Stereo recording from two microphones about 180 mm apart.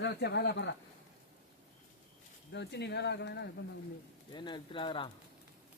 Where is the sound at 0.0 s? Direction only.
65° left (ahead or behind).